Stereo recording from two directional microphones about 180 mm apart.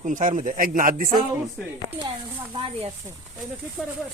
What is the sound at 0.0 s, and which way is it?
Speech, 45° right (ahead or behind).